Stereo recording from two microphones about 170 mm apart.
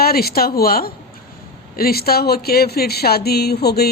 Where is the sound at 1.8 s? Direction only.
65° left (ahead or behind).